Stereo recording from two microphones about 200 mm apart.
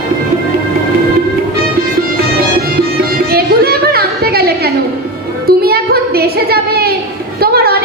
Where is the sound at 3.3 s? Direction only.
50° right (ahead or behind).